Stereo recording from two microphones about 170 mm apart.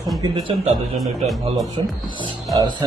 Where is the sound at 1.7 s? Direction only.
25° right (ahead or behind).